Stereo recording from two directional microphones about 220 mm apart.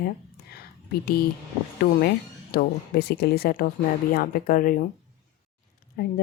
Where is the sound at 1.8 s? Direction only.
45° left (ahead or behind).